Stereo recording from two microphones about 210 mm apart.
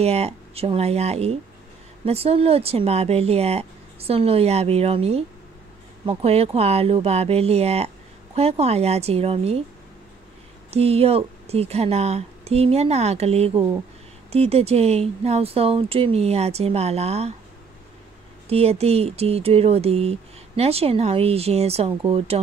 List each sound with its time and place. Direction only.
0.0 s speech: 30° right (ahead or behind)
10.7 s speech: 30° right (ahead or behind)
18.5 s speech: 30° right (ahead or behind)